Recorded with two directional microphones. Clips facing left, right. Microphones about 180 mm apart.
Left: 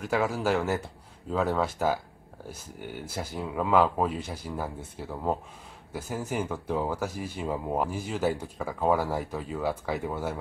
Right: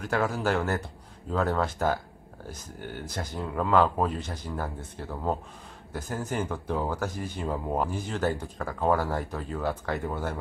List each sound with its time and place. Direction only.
0.0 s speech: 5° left (ahead or behind)